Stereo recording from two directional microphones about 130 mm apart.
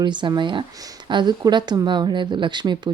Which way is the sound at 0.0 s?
35° right (ahead or behind).